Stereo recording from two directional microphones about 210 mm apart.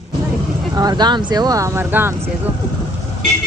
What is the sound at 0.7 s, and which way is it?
Speech, 20° right (ahead or behind).